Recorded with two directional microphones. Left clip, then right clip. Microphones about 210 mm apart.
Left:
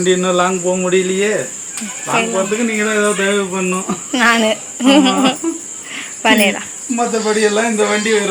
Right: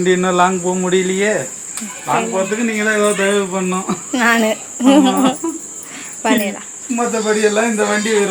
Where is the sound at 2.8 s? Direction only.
15° right (ahead or behind).